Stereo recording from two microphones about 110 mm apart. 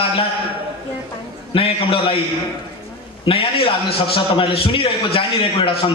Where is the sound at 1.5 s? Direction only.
55° left (ahead or behind).